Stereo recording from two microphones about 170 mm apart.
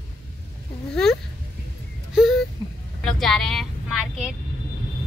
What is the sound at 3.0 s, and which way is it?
Vehicle, centre (ahead or behind).